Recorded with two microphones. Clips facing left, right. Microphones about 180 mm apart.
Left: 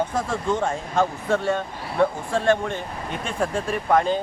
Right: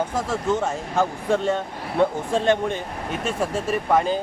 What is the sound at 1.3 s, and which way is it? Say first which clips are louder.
Speech: right 1 dB; 20° right (ahead or behind).